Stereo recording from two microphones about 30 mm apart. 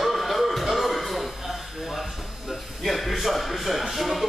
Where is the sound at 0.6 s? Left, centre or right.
Centre.